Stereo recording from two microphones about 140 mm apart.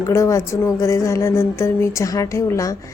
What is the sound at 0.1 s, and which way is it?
A woman's voice, 25° left (ahead or behind).